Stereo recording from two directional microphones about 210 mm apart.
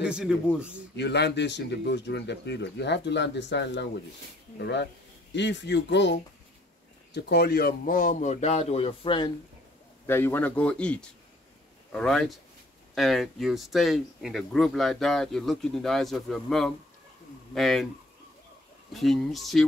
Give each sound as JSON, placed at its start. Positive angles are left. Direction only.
{"t": 0.0, "sound": "speech", "side_deg": -5}
{"t": 0.9, "sound": "a man's voice", "side_deg": 55}
{"t": 7.2, "sound": "speech", "side_deg": 50}
{"t": 10.0, "sound": "a man's voice", "side_deg": 10}
{"t": 18.9, "sound": "speech", "side_deg": 0}